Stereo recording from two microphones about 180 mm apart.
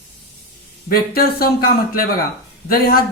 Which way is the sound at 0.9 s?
55° left (ahead or behind).